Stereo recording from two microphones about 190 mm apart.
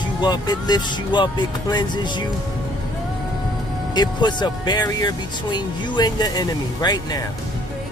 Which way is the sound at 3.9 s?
20° left (ahead or behind).